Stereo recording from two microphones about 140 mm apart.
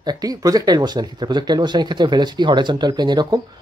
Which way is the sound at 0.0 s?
30° right (ahead or behind).